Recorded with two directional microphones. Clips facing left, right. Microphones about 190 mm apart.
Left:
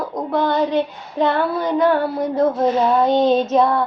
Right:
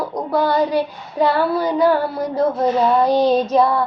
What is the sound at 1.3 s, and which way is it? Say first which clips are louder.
Child singing: right 1 dB; 5° right (ahead or behind).